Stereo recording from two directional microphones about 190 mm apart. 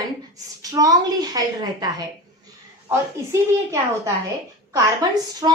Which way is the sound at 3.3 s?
15° right (ahead or behind).